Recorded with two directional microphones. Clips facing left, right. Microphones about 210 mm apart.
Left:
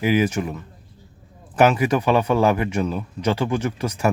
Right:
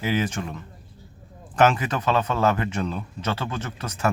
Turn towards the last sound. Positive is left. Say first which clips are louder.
# left 5 dB
turn(degrees=10)  # may be behind; listen again after turning